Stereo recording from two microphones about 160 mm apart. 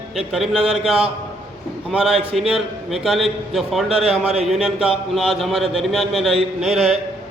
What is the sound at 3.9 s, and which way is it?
Speech, 40° right (ahead or behind).